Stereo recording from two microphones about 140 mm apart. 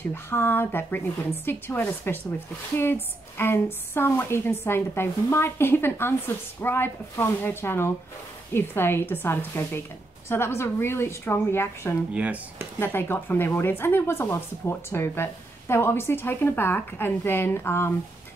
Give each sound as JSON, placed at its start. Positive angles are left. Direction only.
{"t": 0.1, "sound": "speech", "side_deg": 15}
{"t": 12.1, "sound": "speech", "side_deg": -10}
{"t": 12.7, "sound": "speech", "side_deg": 15}